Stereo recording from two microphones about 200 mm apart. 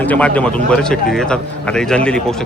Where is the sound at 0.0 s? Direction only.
5° left (ahead or behind).